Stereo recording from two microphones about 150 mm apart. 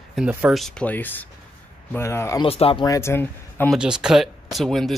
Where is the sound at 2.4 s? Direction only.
40° left (ahead or behind).